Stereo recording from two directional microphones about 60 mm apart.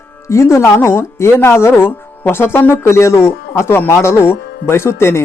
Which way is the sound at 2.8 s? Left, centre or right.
Left.